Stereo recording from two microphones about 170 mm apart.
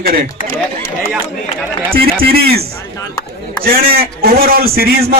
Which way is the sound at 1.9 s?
60° right (ahead or behind).